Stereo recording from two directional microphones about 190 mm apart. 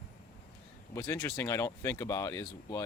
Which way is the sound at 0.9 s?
10° left (ahead or behind).